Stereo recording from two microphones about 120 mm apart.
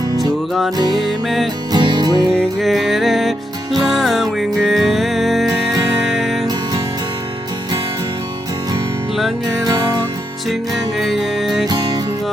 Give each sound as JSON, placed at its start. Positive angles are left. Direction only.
{"t": 1.7, "sound": "music", "side_deg": -35}
{"t": 2.3, "sound": "music", "side_deg": 0}
{"t": 10.9, "sound": "music", "side_deg": 0}